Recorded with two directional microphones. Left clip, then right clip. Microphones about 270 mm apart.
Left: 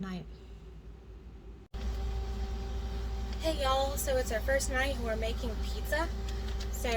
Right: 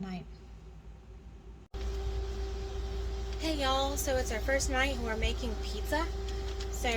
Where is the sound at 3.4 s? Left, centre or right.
Right.